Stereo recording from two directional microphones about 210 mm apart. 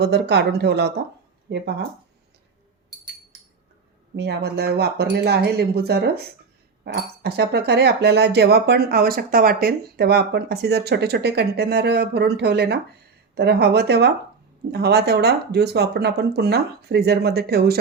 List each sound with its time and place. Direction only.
0.0 s speech: 55° right (ahead or behind)
4.1 s speech: 50° right (ahead or behind)